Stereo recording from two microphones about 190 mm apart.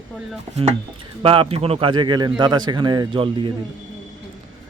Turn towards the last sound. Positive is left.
turn(degrees=-25)  # may be behind; listen again after turning